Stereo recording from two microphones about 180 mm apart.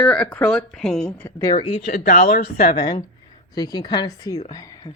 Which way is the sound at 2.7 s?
25° left (ahead or behind).